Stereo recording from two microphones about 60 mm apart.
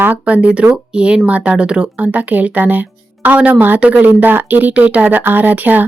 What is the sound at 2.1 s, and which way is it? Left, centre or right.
Speech, right.